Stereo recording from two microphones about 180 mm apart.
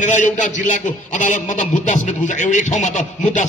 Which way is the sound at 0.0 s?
45° left (ahead or behind).